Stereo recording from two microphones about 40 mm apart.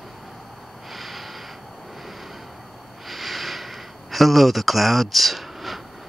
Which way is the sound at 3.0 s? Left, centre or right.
Centre.